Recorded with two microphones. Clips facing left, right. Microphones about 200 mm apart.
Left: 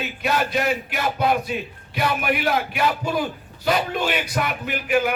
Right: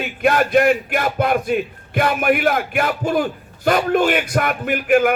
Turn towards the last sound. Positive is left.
turn(degrees=-50)  # may be behind; listen again after turning